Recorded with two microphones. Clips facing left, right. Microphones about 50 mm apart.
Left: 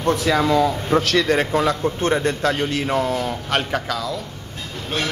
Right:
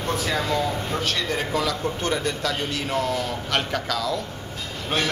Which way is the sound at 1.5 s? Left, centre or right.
Left.